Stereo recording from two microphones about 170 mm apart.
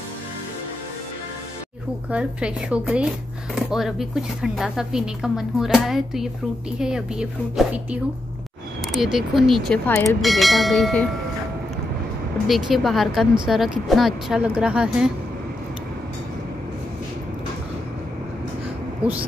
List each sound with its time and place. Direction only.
2.0 s speech: 5° right (ahead or behind)
12.4 s speech: centre (ahead or behind)
19.0 s speech: 5° right (ahead or behind)